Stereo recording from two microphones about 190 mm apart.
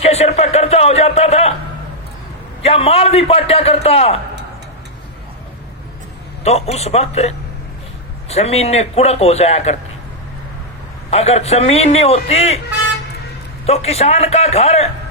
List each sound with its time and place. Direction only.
0.0 s speech: 35° left (ahead or behind)
2.6 s speech: 30° left (ahead or behind)
6.4 s speech: 35° left (ahead or behind)
11.1 s speech: 35° left (ahead or behind)
13.7 s speech: 35° left (ahead or behind)